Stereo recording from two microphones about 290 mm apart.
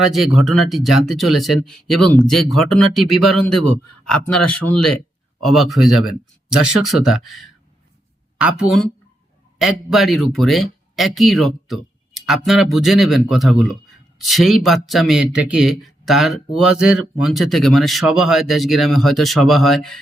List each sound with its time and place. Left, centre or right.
0.3 s speech: centre
3.5 s a man's voice: left
4.0 s speech: centre